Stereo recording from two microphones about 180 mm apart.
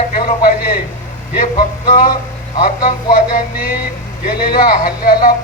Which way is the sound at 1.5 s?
50° left (ahead or behind).